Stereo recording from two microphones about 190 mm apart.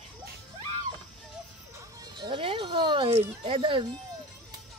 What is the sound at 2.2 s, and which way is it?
Speech, 25° right (ahead or behind).